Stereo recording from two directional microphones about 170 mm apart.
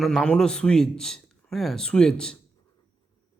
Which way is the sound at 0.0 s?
Centre (ahead or behind).